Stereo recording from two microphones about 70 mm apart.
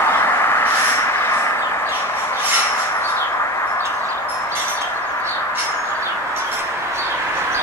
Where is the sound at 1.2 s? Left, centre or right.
Left.